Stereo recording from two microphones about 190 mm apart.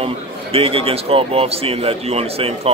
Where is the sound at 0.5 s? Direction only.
30° right (ahead or behind).